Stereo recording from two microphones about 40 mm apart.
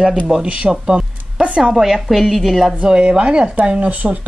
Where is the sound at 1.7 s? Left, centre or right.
Centre.